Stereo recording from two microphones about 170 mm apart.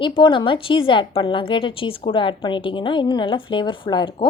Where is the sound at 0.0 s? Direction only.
30° left (ahead or behind).